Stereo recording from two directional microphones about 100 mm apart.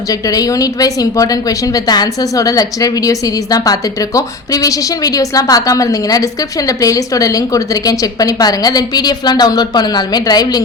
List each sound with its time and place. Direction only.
0.1 s a woman's voice: 35° left (ahead or behind)